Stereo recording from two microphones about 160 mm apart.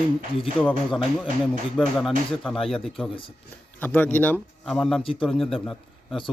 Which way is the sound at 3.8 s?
10° left (ahead or behind).